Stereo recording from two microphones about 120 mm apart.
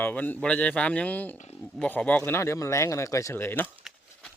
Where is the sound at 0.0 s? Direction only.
15° left (ahead or behind).